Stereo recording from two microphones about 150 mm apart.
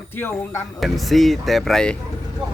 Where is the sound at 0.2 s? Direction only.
15° left (ahead or behind).